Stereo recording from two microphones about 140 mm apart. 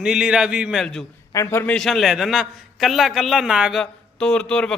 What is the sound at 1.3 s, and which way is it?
Speech, 20° left (ahead or behind).